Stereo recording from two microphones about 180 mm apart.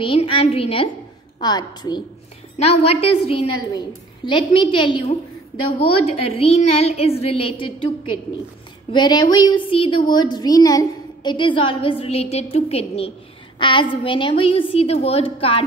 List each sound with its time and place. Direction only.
0.0 s a woman's voice: 30° left (ahead or behind)
2.5 s a woman's voice: 35° left (ahead or behind)